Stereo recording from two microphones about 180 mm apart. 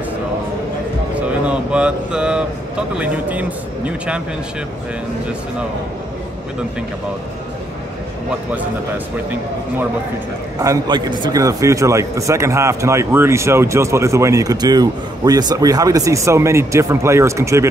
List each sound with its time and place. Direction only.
1.1 s a sound: 5° right (ahead or behind)
3.0 s a man's voice: 10° right (ahead or behind)
8.3 s a man's voice: 10° right (ahead or behind)
10.6 s a man's voice: 20° right (ahead or behind)